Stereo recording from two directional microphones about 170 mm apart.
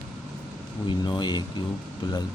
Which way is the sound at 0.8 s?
25° left (ahead or behind).